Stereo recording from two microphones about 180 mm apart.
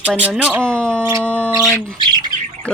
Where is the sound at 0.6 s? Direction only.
5° left (ahead or behind).